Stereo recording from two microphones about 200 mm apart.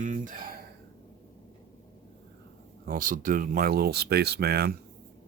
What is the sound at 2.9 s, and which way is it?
Speech, 40° right (ahead or behind).